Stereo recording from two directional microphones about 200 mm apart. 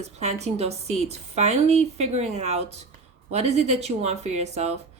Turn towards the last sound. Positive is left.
turn(degrees=-35)  # may be behind; listen again after turning